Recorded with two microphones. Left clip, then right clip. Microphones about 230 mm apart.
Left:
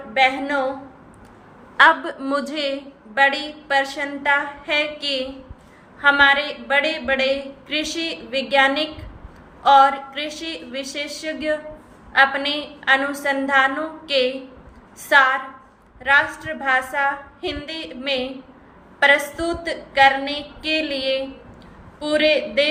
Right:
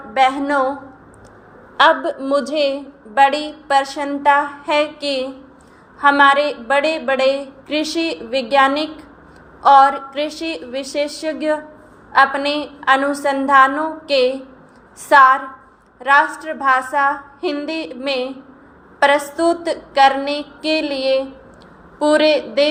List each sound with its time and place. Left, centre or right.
0.1 s a woman's voice: centre
1.7 s a woman's voice: centre
3.2 s a woman's voice: centre